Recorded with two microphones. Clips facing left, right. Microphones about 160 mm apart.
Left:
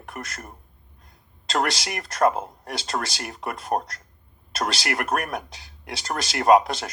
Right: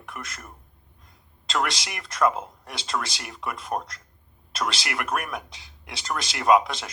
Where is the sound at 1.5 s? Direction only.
45° left (ahead or behind).